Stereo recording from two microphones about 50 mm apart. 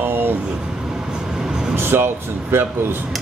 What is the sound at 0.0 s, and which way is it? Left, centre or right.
Vehicle, right.